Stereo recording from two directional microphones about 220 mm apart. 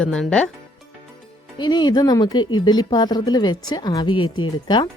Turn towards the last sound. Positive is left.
turn(degrees=20)  # may be behind; listen again after turning